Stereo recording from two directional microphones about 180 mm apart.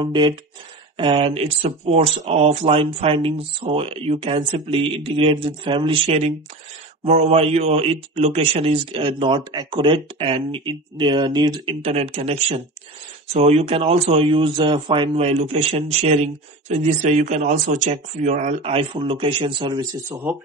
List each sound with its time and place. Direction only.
0.0 s a man's voice: 25° right (ahead or behind)
11.8 s speech: 35° right (ahead or behind)